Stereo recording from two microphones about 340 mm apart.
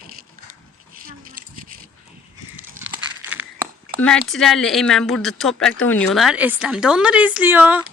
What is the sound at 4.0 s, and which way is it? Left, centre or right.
Speech, centre.